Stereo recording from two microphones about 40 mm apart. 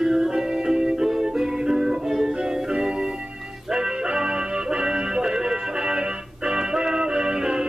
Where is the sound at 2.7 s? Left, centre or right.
Centre.